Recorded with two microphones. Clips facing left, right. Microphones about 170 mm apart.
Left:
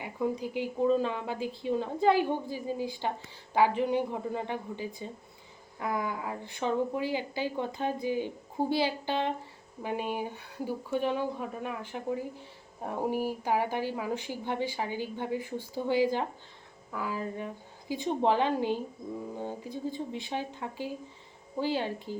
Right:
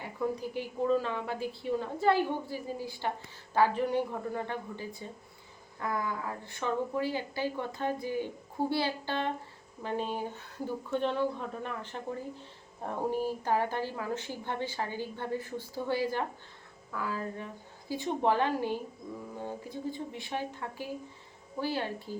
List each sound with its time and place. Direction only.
0.0 s a woman's voice: 15° left (ahead or behind)
19.9 s a woman's voice: 20° left (ahead or behind)